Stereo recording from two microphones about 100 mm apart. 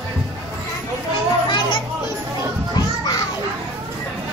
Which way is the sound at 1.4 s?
55° left (ahead or behind).